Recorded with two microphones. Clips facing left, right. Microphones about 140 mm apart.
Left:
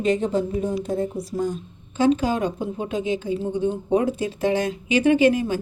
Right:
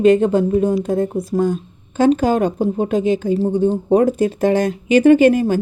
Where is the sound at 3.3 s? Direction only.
40° right (ahead or behind).